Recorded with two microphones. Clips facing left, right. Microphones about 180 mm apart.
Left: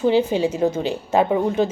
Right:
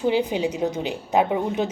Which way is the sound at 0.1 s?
15° right (ahead or behind).